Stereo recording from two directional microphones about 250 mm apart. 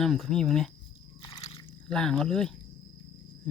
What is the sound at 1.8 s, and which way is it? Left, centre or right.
Speech, centre.